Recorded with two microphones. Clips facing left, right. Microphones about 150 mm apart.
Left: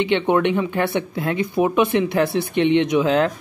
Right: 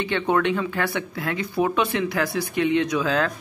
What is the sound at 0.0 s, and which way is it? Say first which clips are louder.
Speech: left 4 dB; 20° left (ahead or behind).